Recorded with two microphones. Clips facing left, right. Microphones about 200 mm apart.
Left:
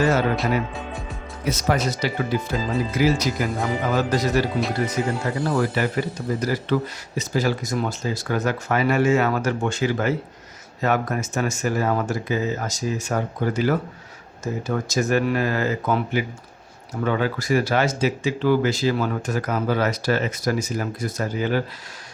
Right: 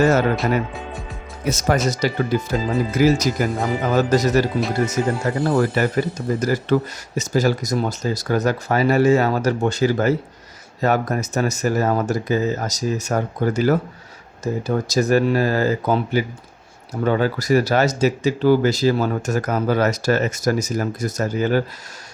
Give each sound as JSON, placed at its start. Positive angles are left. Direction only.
{"t": 0.0, "sound": "speech", "side_deg": -45}
{"t": 1.5, "sound": "speech", "side_deg": -45}